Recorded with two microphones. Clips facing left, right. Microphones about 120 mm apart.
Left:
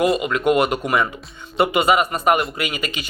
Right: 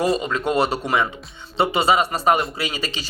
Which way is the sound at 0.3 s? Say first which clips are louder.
Left 3 dB; 30° right (ahead or behind).